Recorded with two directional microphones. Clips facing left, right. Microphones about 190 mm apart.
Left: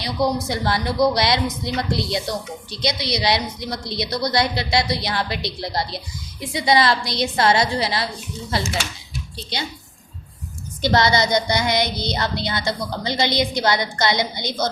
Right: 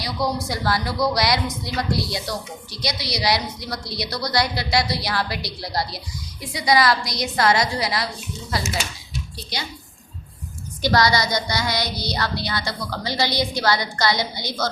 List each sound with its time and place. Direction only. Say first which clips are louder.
0.0 s child singing: left 3 dB; 25° left (ahead or behind)
10.8 s child singing: left 1 dB; 25° left (ahead or behind)